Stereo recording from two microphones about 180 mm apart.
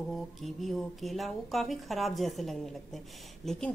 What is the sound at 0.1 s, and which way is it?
A woman's voice, centre (ahead or behind).